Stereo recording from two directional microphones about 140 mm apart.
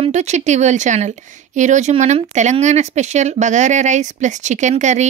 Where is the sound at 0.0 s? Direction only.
55° right (ahead or behind).